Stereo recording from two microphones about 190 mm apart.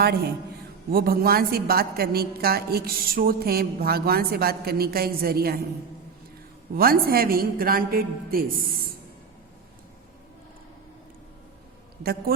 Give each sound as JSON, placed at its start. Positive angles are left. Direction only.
{"t": 0.9, "sound": "a woman's voice", "side_deg": -50}
{"t": 6.7, "sound": "a woman's voice", "side_deg": -50}